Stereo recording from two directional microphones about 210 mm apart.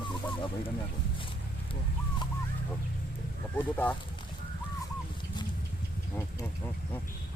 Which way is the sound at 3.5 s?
10° left (ahead or behind).